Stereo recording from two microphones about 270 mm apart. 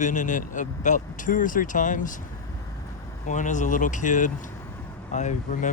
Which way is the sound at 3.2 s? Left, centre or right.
Left.